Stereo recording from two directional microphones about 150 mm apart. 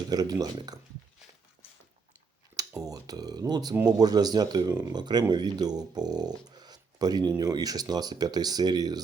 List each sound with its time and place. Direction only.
0.1 s speech: 25° right (ahead or behind)
2.6 s speech: 25° right (ahead or behind)